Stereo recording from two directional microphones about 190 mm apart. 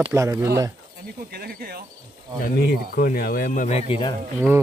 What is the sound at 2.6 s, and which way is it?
Speech, 55° left (ahead or behind).